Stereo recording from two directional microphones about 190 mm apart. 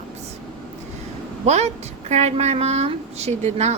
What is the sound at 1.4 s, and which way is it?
A woman's voice, 35° right (ahead or behind).